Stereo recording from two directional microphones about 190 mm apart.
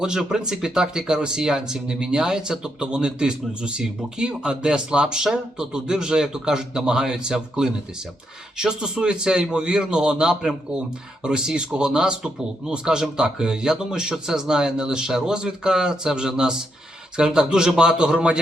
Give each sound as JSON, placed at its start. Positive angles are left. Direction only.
{"t": 0.0, "sound": "a man's voice", "side_deg": -5}